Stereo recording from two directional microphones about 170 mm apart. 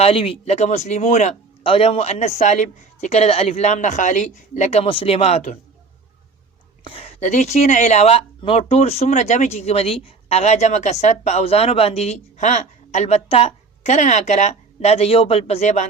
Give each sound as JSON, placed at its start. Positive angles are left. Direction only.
{"t": 0.0, "sound": "a man's voice", "side_deg": 35}
{"t": 6.8, "sound": "a man's voice", "side_deg": 35}